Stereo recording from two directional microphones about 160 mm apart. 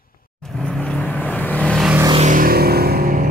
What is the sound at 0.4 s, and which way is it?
Vehicle, centre (ahead or behind).